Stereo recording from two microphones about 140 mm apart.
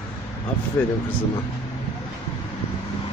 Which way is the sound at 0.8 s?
20° left (ahead or behind).